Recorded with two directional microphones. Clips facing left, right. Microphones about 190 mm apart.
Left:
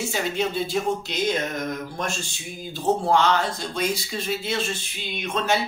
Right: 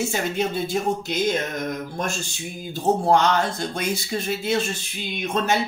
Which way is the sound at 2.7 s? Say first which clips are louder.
Right 2 dB; 45° right (ahead or behind).